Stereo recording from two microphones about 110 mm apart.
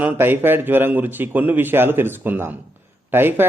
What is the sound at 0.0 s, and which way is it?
A man's voice, 20° right (ahead or behind).